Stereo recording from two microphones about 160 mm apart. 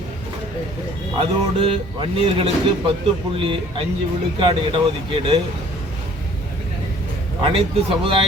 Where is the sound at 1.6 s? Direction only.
35° right (ahead or behind).